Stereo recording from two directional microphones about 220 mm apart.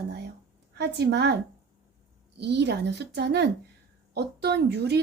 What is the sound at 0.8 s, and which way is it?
Speech, 50° right (ahead or behind).